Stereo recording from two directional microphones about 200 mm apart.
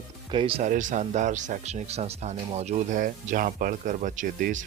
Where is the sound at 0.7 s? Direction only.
40° right (ahead or behind).